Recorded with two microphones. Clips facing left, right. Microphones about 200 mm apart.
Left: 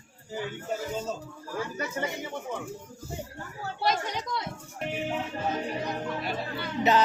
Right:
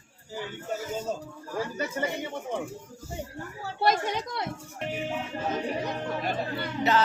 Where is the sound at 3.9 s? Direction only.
60° right (ahead or behind).